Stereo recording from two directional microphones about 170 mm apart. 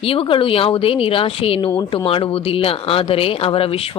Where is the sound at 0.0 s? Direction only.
30° left (ahead or behind).